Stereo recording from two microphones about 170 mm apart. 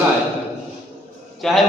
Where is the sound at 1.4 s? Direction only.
Centre (ahead or behind).